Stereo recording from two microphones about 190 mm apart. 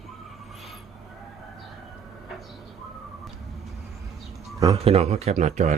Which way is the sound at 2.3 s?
Centre (ahead or behind).